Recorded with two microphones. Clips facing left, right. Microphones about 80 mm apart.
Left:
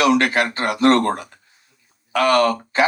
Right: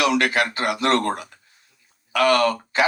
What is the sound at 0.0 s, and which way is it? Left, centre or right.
A man's voice, left.